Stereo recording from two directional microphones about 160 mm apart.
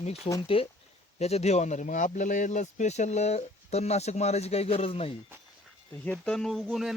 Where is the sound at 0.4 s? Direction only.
35° left (ahead or behind).